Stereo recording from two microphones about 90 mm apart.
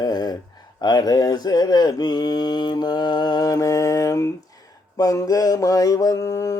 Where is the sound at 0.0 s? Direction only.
50° left (ahead or behind).